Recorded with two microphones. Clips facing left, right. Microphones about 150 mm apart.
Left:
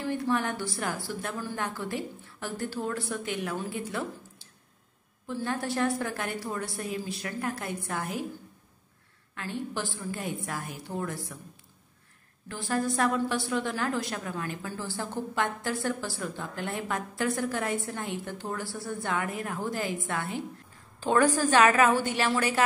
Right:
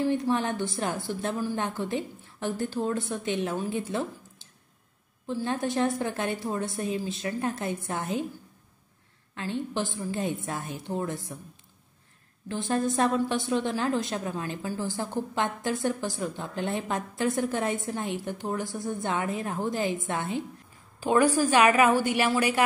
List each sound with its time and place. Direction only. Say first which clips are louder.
0.0 s a woman's voice: right 3 dB; 20° right (ahead or behind)
9.3 s a woman's voice: right 3 dB; 20° right (ahead or behind)
12.4 s a woman's voice: right 2 dB; 20° right (ahead or behind)